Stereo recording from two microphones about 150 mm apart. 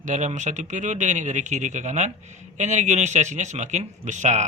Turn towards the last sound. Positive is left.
turn(degrees=-50)  # may be behind; listen again after turning